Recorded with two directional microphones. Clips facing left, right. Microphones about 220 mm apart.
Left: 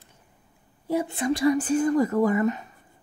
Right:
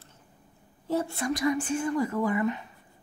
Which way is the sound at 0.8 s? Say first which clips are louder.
Left 3 dB; 15° left (ahead or behind).